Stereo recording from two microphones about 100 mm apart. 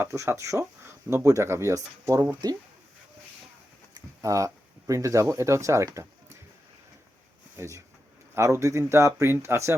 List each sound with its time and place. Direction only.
0.0 s speech: 30° right (ahead or behind)
4.2 s speech: 30° right (ahead or behind)
7.5 s speech: 30° right (ahead or behind)